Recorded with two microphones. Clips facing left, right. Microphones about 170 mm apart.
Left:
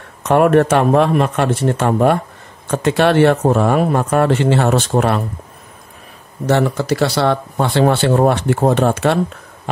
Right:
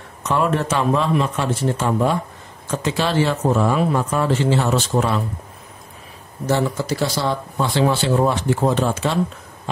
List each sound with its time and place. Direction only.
0.2 s speech: 60° left (ahead or behind)
6.4 s speech: 65° left (ahead or behind)